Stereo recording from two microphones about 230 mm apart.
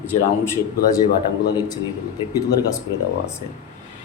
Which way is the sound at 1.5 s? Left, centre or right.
Centre.